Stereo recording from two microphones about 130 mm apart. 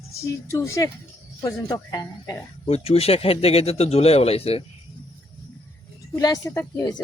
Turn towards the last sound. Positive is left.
turn(degrees=30)  # may be behind; listen again after turning